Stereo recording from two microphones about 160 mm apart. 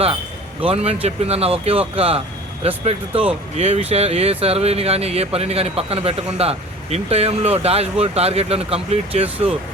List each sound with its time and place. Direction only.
0.6 s speech: 40° right (ahead or behind)